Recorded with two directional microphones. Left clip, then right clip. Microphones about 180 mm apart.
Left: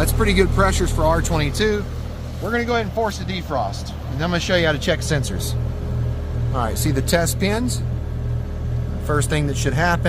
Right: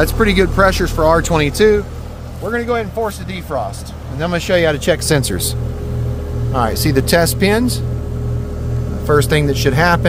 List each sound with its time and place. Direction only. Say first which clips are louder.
0.0 s speech: right 5 dB; 45° right (ahead or behind)
2.4 s speech: right 3 dB; 35° right (ahead or behind); by 5.3 s 70° right (ahead or behind)
6.5 s speech: right 8 dB; 45° right (ahead or behind)
9.0 s speech: right 9 dB; 40° right (ahead or behind)